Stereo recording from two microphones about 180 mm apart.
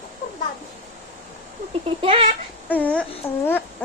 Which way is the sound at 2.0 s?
30° right (ahead or behind).